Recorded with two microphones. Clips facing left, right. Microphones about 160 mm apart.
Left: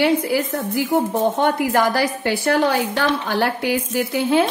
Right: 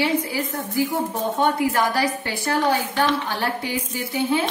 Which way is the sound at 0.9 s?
55° left (ahead or behind).